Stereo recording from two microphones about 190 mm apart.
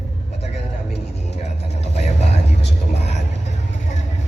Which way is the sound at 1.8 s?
35° left (ahead or behind).